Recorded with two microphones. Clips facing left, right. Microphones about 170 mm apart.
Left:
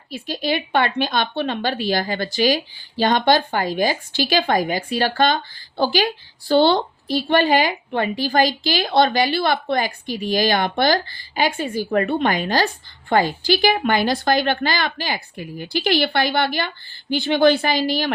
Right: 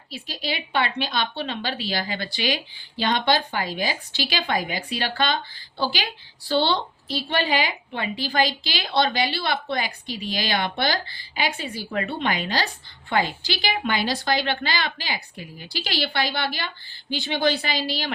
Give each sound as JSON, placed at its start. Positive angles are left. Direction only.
{"t": 0.1, "sound": "speech", "side_deg": 50}